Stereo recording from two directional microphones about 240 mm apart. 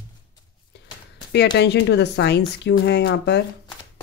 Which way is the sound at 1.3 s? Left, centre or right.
Left.